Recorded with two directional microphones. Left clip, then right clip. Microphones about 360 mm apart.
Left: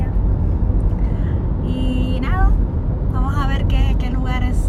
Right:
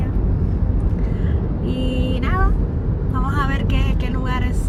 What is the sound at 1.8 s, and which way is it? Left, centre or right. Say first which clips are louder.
Vehicle: even; centre.